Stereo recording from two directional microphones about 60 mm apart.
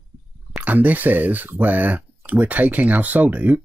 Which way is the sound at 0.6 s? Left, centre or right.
Right.